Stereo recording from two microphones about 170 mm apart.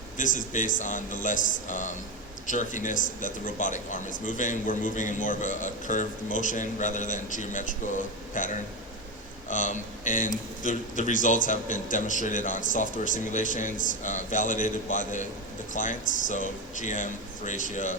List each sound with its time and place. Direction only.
0.2 s a man's voice: 50° left (ahead or behind)